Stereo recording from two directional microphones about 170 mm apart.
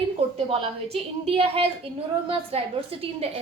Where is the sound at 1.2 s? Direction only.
35° right (ahead or behind).